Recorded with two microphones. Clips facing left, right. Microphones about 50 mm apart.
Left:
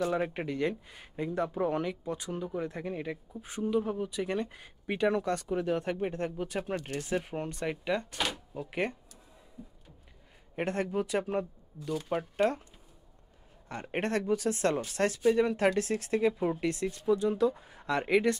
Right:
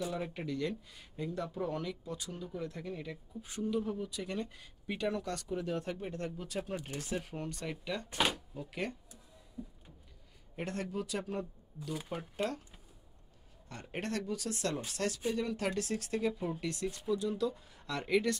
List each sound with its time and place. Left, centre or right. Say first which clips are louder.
0.1 s speech: left 6 dB; left
8.1 s speech: right 1 dB; centre
8.5 s speech: left 6 dB; left
10.5 s speech: left 7 dB; left
13.7 s speech: left 7 dB; left